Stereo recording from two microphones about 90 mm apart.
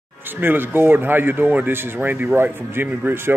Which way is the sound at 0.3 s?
25° right (ahead or behind).